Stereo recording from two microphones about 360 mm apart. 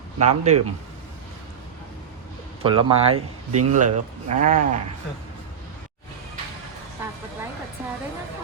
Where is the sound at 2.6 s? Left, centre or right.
Centre.